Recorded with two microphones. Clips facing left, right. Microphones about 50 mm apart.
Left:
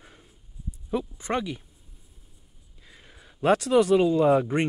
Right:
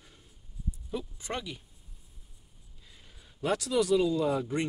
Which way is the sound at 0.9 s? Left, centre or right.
Left.